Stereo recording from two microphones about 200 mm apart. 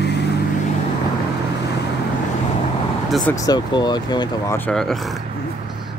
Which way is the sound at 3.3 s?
20° left (ahead or behind).